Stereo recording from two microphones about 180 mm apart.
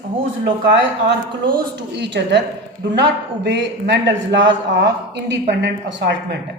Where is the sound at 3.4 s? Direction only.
75° right (ahead or behind).